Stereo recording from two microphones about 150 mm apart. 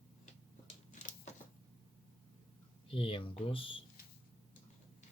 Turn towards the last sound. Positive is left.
turn(degrees=35)  # may be behind; listen again after turning